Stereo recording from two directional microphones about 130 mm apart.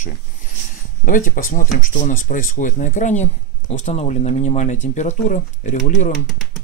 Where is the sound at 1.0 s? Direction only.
90° left; by 6.1 s 65° left (ahead or behind).